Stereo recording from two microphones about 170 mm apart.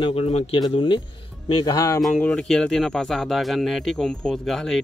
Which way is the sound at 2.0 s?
5° left (ahead or behind).